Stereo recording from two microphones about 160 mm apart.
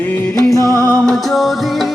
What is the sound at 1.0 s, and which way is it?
Music, centre (ahead or behind).